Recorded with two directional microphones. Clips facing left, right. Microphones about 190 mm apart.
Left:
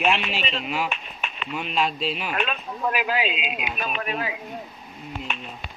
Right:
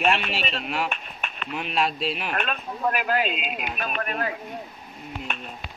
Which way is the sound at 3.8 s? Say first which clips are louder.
Even; 50° right (ahead or behind).